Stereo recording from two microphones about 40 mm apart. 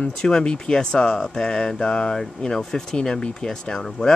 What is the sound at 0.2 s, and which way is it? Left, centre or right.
Speech, left.